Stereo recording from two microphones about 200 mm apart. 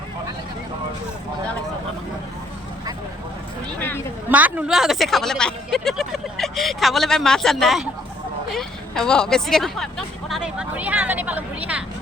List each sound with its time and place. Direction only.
3.8 s a sound: 10° left (ahead or behind)
4.3 s speech: 10° right (ahead or behind)
8.5 s hubbub: 5° left (ahead or behind)